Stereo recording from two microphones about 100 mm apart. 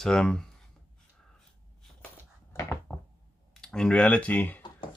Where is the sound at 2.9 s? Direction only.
5° left (ahead or behind).